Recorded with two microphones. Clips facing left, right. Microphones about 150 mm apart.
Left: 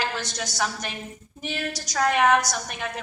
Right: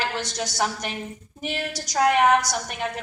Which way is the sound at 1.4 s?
20° right (ahead or behind).